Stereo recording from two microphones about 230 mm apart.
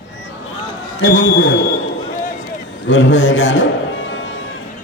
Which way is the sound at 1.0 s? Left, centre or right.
Left.